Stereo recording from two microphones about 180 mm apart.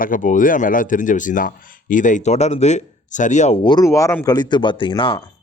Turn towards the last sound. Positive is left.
turn(degrees=25)  # may be behind; listen again after turning